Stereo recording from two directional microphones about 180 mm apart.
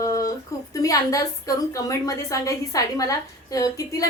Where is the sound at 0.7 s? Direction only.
20° left (ahead or behind).